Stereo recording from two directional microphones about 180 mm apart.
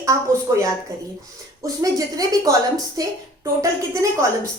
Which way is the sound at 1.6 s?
20° right (ahead or behind).